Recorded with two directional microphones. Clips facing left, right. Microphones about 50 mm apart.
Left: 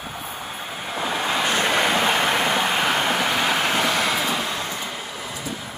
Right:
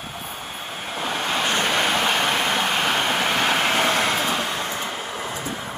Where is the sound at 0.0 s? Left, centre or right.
Centre.